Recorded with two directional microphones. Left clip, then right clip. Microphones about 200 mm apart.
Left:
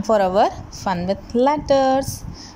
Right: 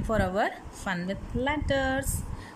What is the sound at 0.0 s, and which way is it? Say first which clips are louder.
A woman's voice: left 11 dB; 10° left (ahead or behind).